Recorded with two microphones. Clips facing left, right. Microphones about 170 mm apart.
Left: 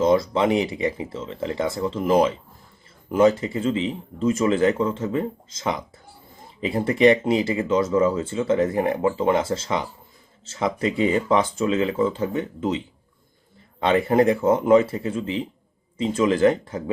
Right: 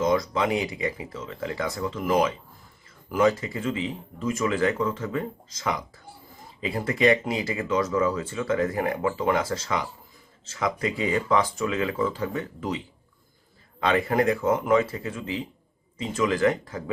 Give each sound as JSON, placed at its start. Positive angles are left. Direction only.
{"t": 0.0, "sound": "speech", "side_deg": 30}
{"t": 13.8, "sound": "speech", "side_deg": 25}